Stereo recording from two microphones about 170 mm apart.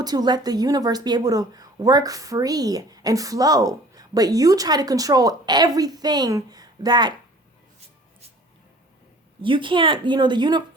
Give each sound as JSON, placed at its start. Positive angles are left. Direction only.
{"t": 0.0, "sound": "a woman's voice", "side_deg": -25}
{"t": 9.4, "sound": "a woman's voice", "side_deg": -30}